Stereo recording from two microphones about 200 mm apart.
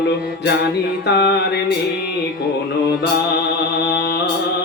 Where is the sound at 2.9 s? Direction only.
55° left (ahead or behind).